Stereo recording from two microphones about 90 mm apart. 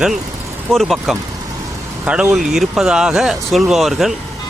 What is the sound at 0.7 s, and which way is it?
Speech, centre (ahead or behind).